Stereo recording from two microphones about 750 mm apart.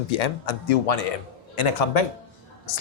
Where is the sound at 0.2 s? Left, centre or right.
Left.